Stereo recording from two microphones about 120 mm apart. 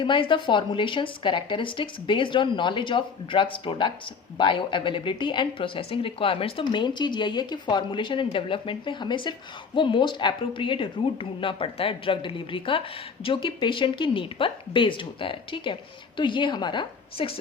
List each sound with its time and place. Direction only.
0.0 s speech: 40° left (ahead or behind)